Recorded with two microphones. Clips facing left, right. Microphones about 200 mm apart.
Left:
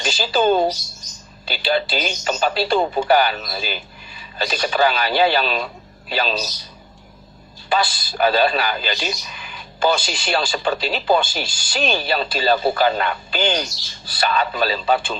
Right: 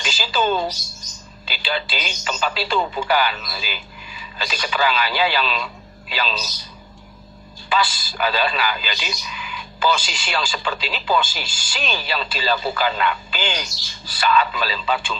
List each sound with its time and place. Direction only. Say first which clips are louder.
0.0 s a man's voice: left 4 dB; 35° left (ahead or behind)
7.9 s speech: left 5 dB; 40° left (ahead or behind)